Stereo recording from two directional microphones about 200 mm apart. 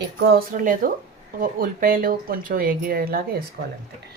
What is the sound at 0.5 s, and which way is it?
Speech, 45° right (ahead or behind).